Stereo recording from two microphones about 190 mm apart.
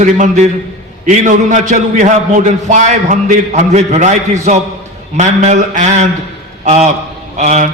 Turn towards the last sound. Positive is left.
turn(degrees=-40)  # may be behind; listen again after turning